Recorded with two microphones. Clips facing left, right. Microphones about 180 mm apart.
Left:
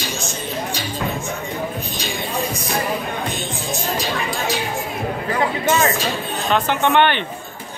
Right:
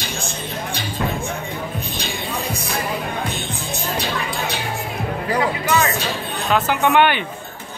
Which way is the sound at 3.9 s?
60° right (ahead or behind).